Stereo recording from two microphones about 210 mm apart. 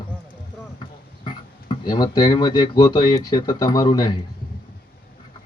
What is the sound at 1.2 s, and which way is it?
Speech, 25° left (ahead or behind).